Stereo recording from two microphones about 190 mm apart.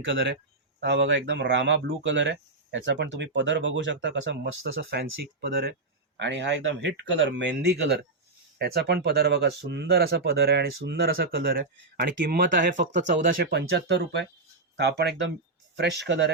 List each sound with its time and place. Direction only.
0.0 s speech: 75° right (ahead or behind); by 5.7 s 55° right (ahead or behind)
6.1 s speech: 70° right (ahead or behind)